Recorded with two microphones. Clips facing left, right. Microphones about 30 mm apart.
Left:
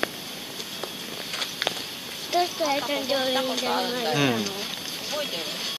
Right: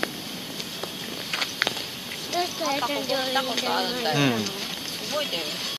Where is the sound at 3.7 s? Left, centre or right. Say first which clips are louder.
Even; right.